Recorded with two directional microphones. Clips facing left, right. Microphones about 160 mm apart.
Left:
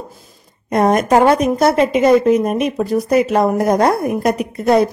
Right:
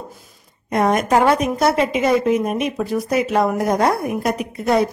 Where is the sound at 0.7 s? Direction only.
40° left (ahead or behind).